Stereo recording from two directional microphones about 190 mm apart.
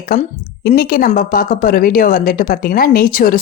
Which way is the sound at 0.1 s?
45° left (ahead or behind).